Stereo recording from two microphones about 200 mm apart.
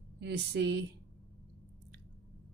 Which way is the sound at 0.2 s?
55° right (ahead or behind).